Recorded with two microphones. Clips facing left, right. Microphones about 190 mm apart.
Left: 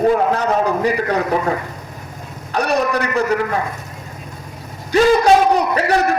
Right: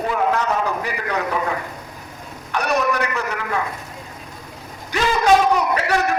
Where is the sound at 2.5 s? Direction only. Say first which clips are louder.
Left 4 dB; 35° left (ahead or behind).